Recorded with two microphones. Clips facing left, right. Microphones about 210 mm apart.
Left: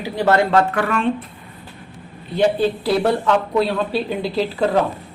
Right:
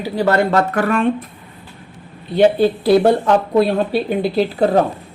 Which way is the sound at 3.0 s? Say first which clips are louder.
Right 4 dB; 35° right (ahead or behind).